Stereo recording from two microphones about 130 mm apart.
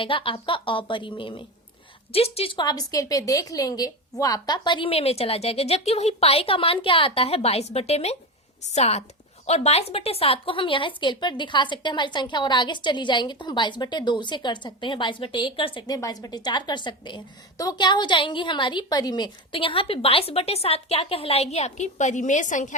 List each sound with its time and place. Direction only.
0.0 s a woman's voice: 40° left (ahead or behind)
16.0 s a woman's voice: 30° left (ahead or behind); by 22.7 s 75° left (ahead or behind)